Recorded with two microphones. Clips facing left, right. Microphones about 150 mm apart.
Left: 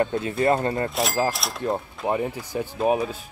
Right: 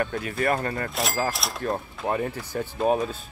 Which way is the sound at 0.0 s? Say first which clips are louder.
Left 4 dB; 25° left (ahead or behind).